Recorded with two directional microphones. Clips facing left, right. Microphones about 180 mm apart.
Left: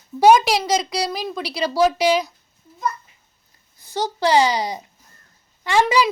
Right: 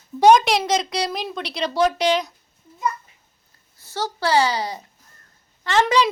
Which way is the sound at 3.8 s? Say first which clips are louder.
Left 4 dB; 15° left (ahead or behind).